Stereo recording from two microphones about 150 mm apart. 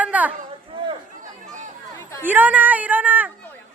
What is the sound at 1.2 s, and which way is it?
Chatter, 55° right (ahead or behind).